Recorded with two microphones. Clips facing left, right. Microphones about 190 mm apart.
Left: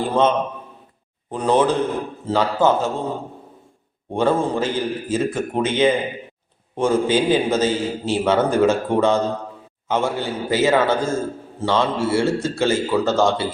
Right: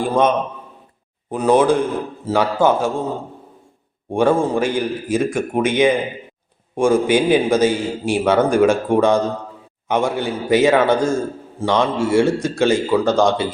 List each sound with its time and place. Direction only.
0.0 s a man's voice: 15° right (ahead or behind)
4.1 s a man's voice: 10° right (ahead or behind)